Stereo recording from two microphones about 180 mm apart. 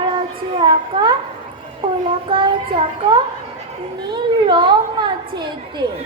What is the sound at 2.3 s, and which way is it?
A woman's voice, 30° right (ahead or behind).